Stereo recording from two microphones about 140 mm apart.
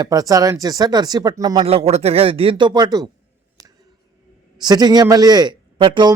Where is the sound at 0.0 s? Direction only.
25° right (ahead or behind).